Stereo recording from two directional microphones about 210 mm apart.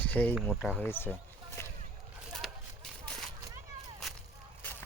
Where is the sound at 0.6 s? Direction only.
5° left (ahead or behind).